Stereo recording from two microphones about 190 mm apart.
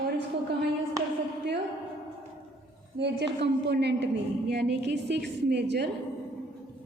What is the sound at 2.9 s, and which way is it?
A woman's voice, 60° right (ahead or behind).